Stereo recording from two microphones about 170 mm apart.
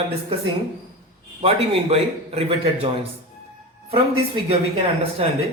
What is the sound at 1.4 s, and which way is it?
Speech, 35° right (ahead or behind).